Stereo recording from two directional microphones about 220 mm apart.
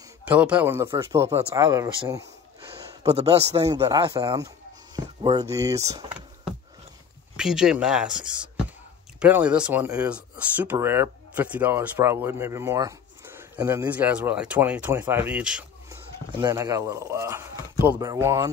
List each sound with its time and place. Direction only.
0.2 s speech: 5° right (ahead or behind)
3.1 s a man's voice: 30° right (ahead or behind)
3.8 s speech: 15° right (ahead or behind)
4.9 s a sound: 20° right (ahead or behind)
5.5 s speech: 15° right (ahead or behind)
16.3 s speech: 20° right (ahead or behind)